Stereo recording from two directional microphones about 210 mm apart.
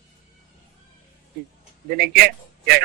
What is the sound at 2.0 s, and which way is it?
Speech, 50° right (ahead or behind).